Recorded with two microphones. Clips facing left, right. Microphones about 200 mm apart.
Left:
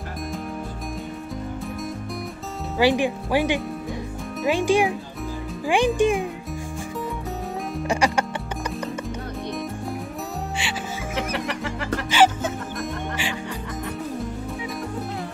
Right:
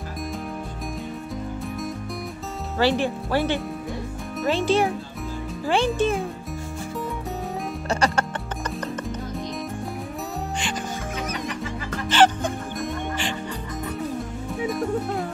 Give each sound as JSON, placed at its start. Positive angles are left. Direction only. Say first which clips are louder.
{"t": 2.8, "sound": "speech", "louder": "left 2 dB", "side_deg": 15}
{"t": 7.9, "sound": "music", "louder": "left 1 dB", "side_deg": 10}
{"t": 11.3, "sound": "music", "louder": "left 2 dB", "side_deg": 70}
{"t": 12.1, "sound": "music", "louder": "right 1 dB", "side_deg": 5}